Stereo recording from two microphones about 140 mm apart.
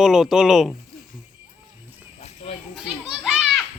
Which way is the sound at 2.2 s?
45° left (ahead or behind).